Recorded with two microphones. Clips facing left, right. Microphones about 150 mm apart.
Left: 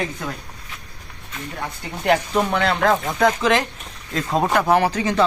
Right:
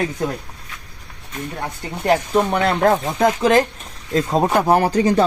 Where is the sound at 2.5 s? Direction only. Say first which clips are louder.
Right 2 dB; 45° right (ahead or behind).